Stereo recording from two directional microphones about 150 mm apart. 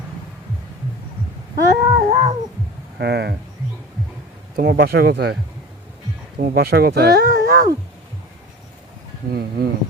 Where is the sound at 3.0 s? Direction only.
90° right.